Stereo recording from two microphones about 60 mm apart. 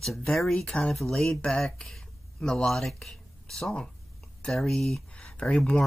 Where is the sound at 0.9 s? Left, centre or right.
Centre.